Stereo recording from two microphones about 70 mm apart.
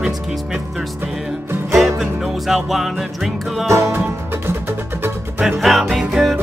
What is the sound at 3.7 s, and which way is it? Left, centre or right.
Music, right.